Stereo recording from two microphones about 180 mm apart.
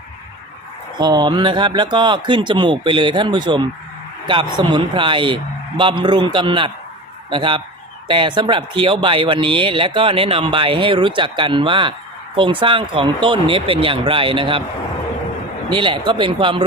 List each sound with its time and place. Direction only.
0.9 s speech: 25° right (ahead or behind)
15.7 s speech: 25° right (ahead or behind)